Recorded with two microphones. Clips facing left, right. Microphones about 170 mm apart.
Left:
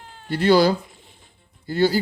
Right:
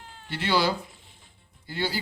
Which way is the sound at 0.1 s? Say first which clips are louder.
Left 10 dB; 50° left (ahead or behind).